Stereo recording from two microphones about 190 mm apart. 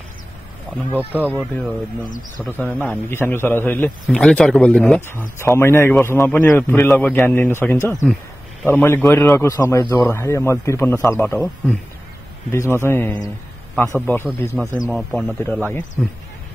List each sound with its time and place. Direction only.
0.9 s speech: 10° right (ahead or behind)
2.4 s a man's voice: 10° left (ahead or behind)
14.5 s speech: 10° right (ahead or behind)
14.9 s speech: centre (ahead or behind)